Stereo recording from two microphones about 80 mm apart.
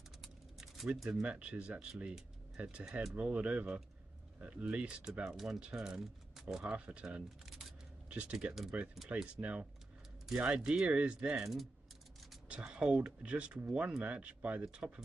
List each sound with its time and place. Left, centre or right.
0.2 s typing: centre
0.9 s speech: centre
1.2 s speech: centre
3.2 s speech: centre